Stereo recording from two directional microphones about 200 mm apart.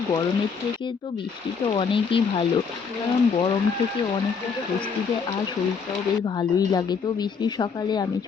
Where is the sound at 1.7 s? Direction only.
25° left (ahead or behind).